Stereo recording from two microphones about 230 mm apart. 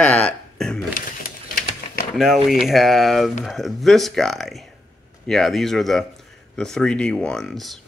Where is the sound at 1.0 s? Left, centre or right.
Left.